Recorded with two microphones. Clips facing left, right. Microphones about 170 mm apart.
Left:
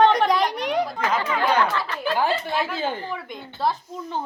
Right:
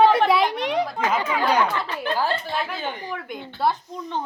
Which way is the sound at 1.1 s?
15° right (ahead or behind).